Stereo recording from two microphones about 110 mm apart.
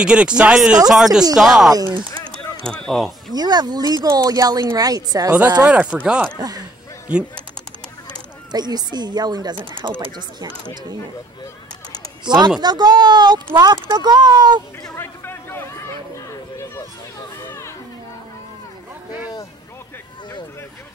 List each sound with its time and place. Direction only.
0.0 s speech: 10° right (ahead or behind)
1.7 s speech: 35° right (ahead or behind)
2.6 s speech: 5° left (ahead or behind)
3.3 s speech: 40° right (ahead or behind)
5.7 s speech: 10° right (ahead or behind)
8.5 s speech: 40° right (ahead or behind)
12.3 s speech: 40° right (ahead or behind)
15.0 s a sound: 20° left (ahead or behind)
17.5 s music: 25° left (ahead or behind)